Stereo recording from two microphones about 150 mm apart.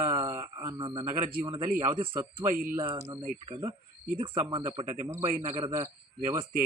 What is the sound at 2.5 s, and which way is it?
Speech, 70° right (ahead or behind).